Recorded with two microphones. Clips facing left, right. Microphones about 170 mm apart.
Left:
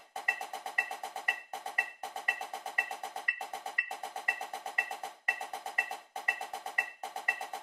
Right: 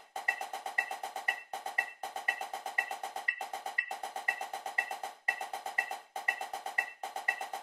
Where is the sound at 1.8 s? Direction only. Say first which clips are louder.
Even; 25° right (ahead or behind).